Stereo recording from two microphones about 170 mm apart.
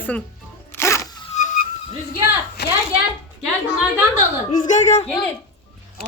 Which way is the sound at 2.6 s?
75° left (ahead or behind).